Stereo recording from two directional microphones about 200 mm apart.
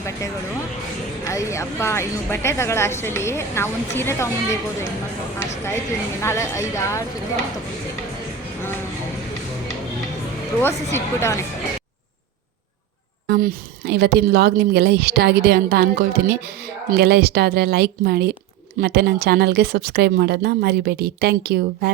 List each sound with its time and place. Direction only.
1.2 s a woman's voice: 15° left (ahead or behind)
6.2 s a woman's voice: 15° left (ahead or behind)
10.9 s a woman's voice: 15° left (ahead or behind)
13.2 s a woman's voice: 45° right (ahead or behind)